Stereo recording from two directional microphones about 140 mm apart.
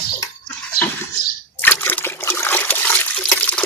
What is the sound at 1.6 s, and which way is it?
Water, 15° left (ahead or behind).